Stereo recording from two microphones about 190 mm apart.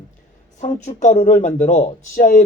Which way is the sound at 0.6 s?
40° left (ahead or behind).